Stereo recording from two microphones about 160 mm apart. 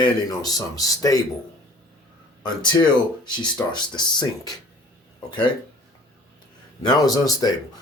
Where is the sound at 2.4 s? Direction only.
30° left (ahead or behind).